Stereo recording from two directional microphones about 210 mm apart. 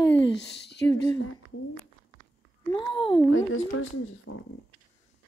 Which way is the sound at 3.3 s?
70° left (ahead or behind).